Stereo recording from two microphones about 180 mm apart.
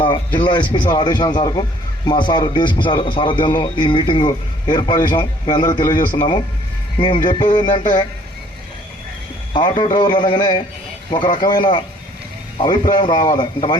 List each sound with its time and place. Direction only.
0.0 s a man's voice: 25° left (ahead or behind)
9.5 s a man's voice: 25° left (ahead or behind)